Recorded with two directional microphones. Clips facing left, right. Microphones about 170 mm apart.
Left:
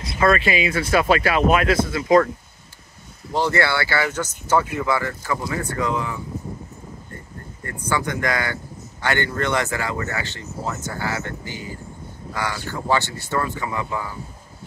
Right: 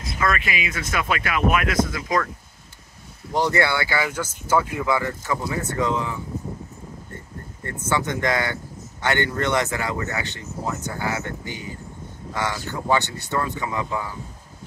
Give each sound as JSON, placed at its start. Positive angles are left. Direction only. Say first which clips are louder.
{"t": 0.2, "sound": "speech", "louder": "left 6 dB", "side_deg": 30}
{"t": 3.3, "sound": "speech", "louder": "left 1 dB", "side_deg": -15}
{"t": 7.6, "sound": "speech", "louder": "even", "side_deg": -20}